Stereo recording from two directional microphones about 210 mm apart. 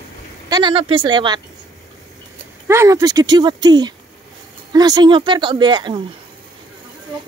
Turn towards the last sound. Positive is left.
turn(degrees=-20)  # may be behind; listen again after turning